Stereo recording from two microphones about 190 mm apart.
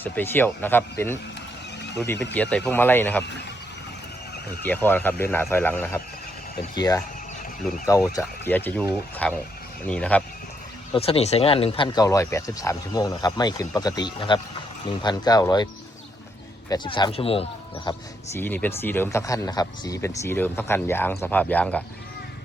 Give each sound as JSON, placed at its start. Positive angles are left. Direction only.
{"t": 0.0, "sound": "speech", "side_deg": 10}
{"t": 2.3, "sound": "speech", "side_deg": 5}
{"t": 4.6, "sound": "speech", "side_deg": 10}
{"t": 6.7, "sound": "speech", "side_deg": 20}
{"t": 8.1, "sound": "speech", "side_deg": 10}
{"t": 10.9, "sound": "speech", "side_deg": 30}
{"t": 18.3, "sound": "speech", "side_deg": 10}